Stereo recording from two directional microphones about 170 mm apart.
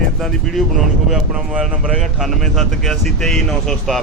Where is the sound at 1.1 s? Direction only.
Centre (ahead or behind).